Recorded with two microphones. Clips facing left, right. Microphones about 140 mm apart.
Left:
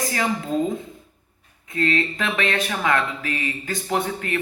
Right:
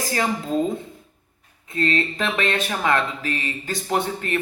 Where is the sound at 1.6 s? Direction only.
30° right (ahead or behind).